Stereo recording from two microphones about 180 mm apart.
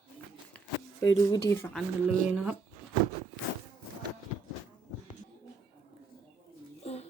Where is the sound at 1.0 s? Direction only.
20° left (ahead or behind).